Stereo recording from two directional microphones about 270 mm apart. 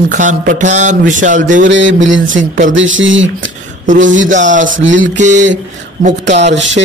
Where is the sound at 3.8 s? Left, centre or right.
Right.